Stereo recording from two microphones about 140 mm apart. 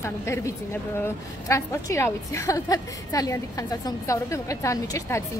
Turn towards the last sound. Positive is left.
turn(degrees=20)  # may be behind; listen again after turning